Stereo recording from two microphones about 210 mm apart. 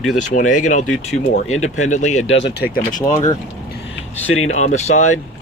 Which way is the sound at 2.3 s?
60° left (ahead or behind).